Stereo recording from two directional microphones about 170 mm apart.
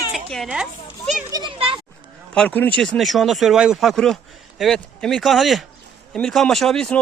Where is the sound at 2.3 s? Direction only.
10° left (ahead or behind).